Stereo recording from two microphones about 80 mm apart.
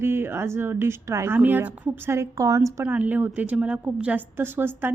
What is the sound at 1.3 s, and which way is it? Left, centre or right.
A woman's voice, right.